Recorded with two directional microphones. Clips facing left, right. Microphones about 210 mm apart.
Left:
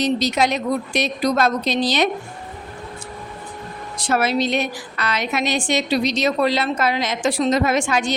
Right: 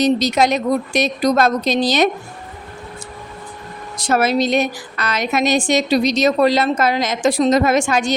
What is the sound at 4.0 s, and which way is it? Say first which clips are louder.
A woman's voice: right 3 dB; 45° right (ahead or behind).